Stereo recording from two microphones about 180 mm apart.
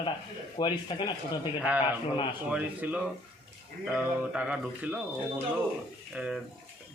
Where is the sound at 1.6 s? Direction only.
10° right (ahead or behind).